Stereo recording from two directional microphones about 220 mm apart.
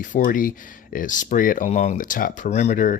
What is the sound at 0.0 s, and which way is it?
Speech, 35° left (ahead or behind).